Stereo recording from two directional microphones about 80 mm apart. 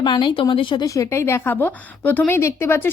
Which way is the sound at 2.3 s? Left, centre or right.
Left.